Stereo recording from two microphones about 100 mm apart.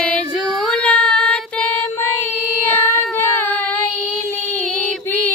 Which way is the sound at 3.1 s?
20° left (ahead or behind).